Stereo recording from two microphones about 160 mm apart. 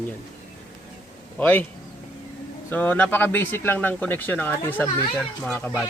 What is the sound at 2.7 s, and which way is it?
Speech, 10° left (ahead or behind).